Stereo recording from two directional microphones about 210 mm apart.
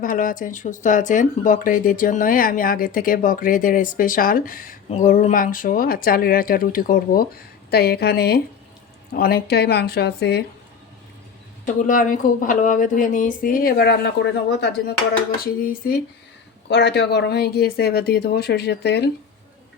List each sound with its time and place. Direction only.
0.0 s speech: 40° left (ahead or behind)
11.6 s speech: 40° left (ahead or behind)